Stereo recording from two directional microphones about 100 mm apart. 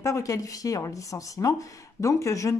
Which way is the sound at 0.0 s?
30° left (ahead or behind).